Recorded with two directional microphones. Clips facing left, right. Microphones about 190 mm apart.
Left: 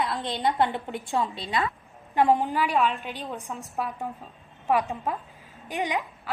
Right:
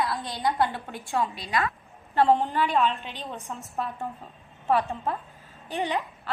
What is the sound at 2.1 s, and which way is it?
A woman's voice, 15° left (ahead or behind).